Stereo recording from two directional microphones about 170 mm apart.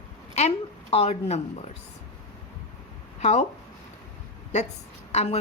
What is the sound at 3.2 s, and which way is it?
Speech, 40° left (ahead or behind).